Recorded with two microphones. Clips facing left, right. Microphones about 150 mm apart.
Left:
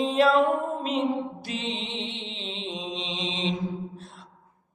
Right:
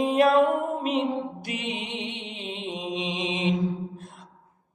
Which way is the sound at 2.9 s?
50° right (ahead or behind).